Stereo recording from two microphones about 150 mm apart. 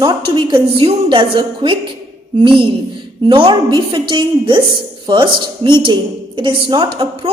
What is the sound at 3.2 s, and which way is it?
A woman's voice, 35° right (ahead or behind).